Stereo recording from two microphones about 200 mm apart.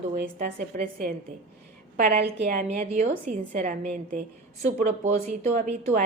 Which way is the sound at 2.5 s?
40° right (ahead or behind).